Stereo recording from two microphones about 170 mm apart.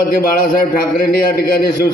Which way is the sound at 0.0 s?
60° left (ahead or behind).